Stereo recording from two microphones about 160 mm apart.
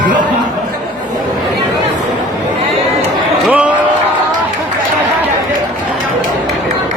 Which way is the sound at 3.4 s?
10° right (ahead or behind).